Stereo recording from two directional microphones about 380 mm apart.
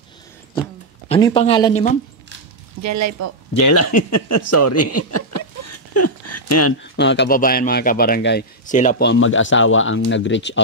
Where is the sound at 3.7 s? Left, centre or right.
Left.